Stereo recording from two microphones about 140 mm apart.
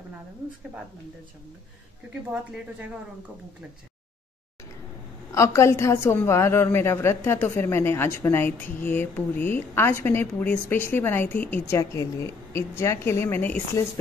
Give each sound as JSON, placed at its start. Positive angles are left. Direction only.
{"t": 5.3, "sound": "a woman's voice", "side_deg": 20}